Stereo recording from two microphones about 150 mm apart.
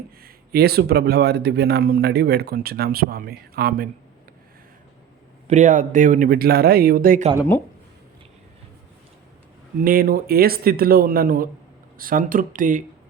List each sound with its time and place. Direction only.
0.2 s speech: 90° right
5.5 s speech: 55° right (ahead or behind); by 7.2 s 75° right (ahead or behind)
9.8 s speech: 75° right (ahead or behind)